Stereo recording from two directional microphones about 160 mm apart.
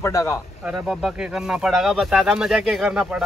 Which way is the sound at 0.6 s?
5° right (ahead or behind).